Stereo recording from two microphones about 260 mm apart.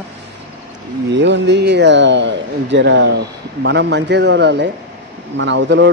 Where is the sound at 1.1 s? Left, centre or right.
Right.